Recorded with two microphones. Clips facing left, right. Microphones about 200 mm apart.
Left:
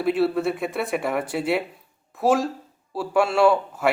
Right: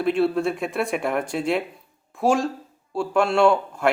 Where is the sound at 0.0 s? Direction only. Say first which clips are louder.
Even; 5° left (ahead or behind).